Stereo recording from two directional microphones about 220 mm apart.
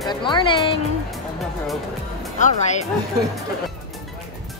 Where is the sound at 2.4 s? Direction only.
30° left (ahead or behind).